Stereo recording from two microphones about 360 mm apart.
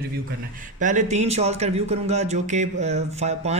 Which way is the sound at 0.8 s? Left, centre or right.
Centre.